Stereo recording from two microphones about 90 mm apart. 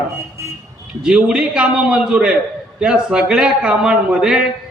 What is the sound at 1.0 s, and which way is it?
A man's voice, 10° right (ahead or behind).